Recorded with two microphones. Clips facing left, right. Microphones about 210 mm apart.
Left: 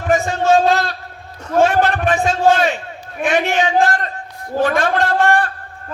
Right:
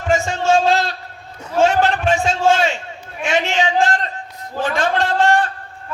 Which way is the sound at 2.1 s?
15° left (ahead or behind).